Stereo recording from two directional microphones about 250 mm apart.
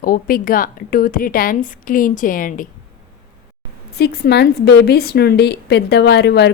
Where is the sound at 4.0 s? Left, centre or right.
Left.